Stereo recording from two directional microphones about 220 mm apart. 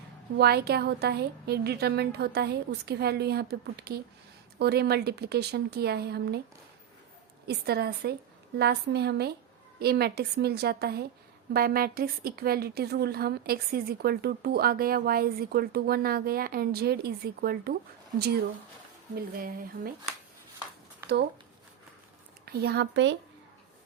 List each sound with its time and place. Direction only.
0.3 s a woman's voice: 45° right (ahead or behind)
7.4 s a woman's voice: 45° right (ahead or behind)
19.1 s speech: 40° right (ahead or behind)
22.5 s a woman's voice: 50° right (ahead or behind)